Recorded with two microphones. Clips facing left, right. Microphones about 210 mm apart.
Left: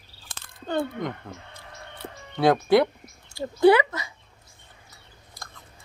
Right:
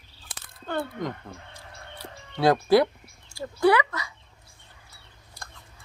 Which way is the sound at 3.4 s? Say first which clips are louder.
Left 4 dB; 25° left (ahead or behind).